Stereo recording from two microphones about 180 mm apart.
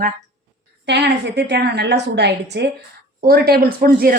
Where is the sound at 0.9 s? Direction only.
70° right (ahead or behind).